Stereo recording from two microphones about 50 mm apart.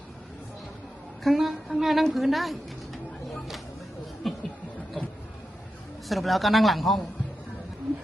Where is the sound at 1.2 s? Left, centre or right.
Centre.